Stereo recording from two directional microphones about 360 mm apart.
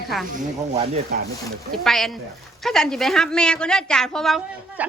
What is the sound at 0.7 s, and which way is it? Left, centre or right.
Speech, centre.